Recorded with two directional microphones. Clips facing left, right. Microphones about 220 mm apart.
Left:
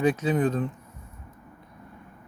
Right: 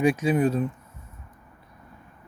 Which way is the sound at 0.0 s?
10° right (ahead or behind).